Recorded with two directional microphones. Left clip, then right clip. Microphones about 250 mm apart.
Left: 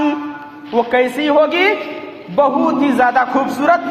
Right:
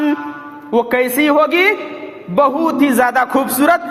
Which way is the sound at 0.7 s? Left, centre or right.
Right.